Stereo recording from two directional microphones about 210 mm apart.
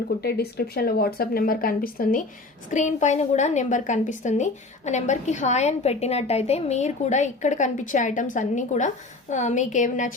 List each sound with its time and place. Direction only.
0.2 s a woman's voice: 50° left (ahead or behind)